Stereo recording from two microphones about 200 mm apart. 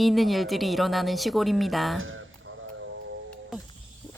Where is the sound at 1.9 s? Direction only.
80° right.